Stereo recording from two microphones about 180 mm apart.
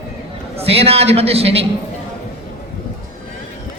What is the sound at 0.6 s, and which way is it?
A man's voice, 35° right (ahead or behind).